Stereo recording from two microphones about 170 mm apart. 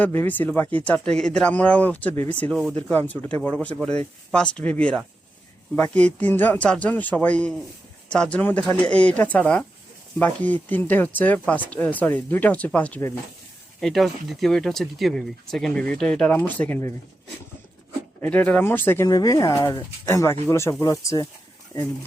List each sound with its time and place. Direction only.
0.0 s speech: 10° left (ahead or behind)
13.8 s speech: centre (ahead or behind)
18.2 s speech: 10° left (ahead or behind)